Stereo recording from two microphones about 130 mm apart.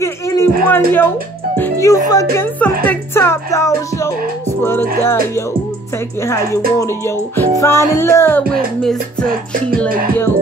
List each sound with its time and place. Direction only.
0.0 s music: 20° left (ahead or behind)
1.6 s speech: 25° left (ahead or behind)
2.4 s speech: 10° left (ahead or behind)
8.8 s music: 5° left (ahead or behind)